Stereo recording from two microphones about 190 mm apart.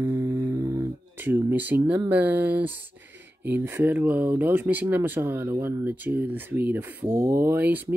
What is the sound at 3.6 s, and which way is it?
Speech, 10° right (ahead or behind).